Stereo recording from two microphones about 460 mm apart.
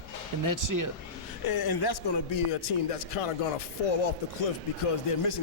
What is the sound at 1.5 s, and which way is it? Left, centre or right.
Speech, left.